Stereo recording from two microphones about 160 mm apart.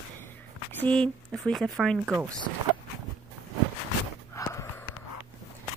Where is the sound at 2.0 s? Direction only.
10° right (ahead or behind).